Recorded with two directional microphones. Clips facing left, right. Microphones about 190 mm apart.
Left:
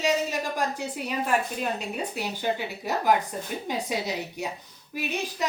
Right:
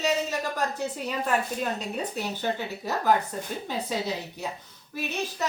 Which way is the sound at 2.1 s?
10° left (ahead or behind).